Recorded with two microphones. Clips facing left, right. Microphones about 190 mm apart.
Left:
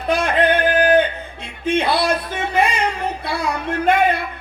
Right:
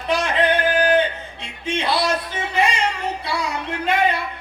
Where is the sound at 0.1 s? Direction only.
50° left (ahead or behind).